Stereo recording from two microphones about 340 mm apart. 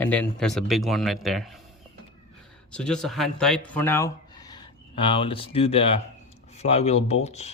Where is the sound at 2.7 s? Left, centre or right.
Centre.